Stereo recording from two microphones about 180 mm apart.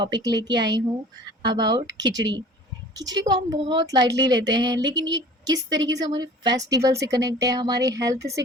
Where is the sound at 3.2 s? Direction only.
25° right (ahead or behind).